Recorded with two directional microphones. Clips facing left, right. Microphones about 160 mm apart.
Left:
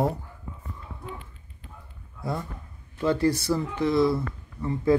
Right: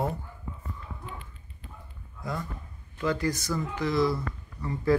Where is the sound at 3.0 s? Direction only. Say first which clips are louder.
Left 5 dB; 30° left (ahead or behind).